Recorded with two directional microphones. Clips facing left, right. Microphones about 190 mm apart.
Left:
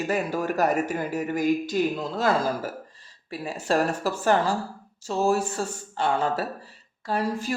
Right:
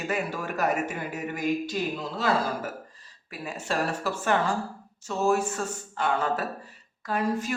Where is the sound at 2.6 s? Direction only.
30° left (ahead or behind).